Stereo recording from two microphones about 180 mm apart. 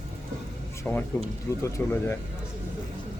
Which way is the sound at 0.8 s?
10° left (ahead or behind).